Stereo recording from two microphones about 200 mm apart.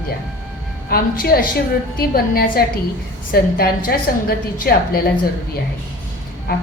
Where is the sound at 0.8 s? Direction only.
50° left (ahead or behind).